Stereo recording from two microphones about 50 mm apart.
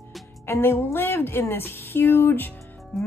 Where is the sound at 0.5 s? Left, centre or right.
Left.